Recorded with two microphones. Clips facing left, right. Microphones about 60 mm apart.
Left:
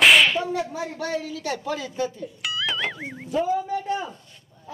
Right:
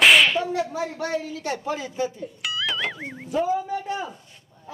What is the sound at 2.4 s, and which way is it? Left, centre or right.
Music, centre.